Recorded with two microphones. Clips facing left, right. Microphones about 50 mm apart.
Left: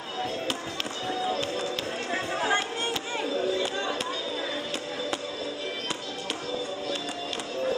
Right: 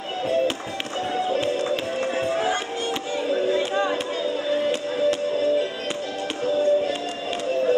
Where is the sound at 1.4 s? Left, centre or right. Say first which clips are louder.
Right 7 dB; right.